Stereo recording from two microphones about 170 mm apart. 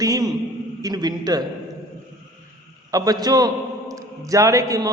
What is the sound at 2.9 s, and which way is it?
A man's voice, 20° right (ahead or behind).